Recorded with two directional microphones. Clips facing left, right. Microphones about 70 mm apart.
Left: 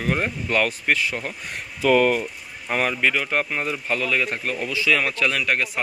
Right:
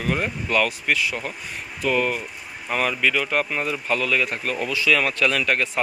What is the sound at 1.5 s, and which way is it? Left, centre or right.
Speech, left.